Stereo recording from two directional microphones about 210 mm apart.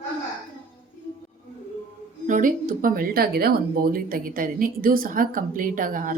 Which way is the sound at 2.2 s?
40° right (ahead or behind).